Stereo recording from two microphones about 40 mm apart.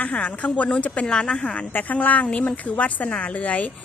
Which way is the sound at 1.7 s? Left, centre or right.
Left.